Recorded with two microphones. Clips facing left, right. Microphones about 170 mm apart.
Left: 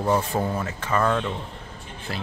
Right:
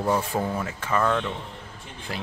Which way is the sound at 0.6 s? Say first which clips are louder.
Left 1 dB; 5° right (ahead or behind).